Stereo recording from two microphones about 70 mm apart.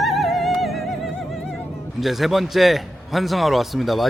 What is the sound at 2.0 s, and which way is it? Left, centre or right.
Speech, centre.